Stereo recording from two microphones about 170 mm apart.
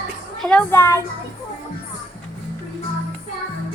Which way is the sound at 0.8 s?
15° left (ahead or behind).